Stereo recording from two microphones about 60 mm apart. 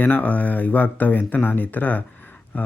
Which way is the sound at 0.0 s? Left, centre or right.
Left.